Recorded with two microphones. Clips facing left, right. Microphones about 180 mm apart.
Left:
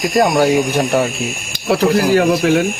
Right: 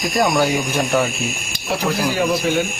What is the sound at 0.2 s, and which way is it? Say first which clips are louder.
Speech: left 5 dB; 40° left (ahead or behind).